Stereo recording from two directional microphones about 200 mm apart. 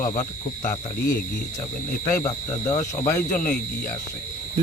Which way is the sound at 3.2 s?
40° left (ahead or behind).